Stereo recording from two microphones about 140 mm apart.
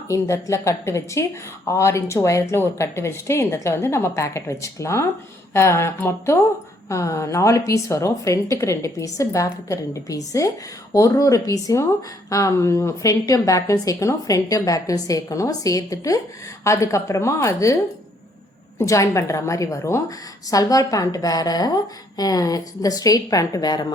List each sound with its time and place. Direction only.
0.1 s a woman's voice: 20° left (ahead or behind)
18.8 s a woman's voice: 20° left (ahead or behind)